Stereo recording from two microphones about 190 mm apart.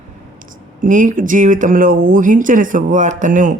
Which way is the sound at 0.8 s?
45° right (ahead or behind).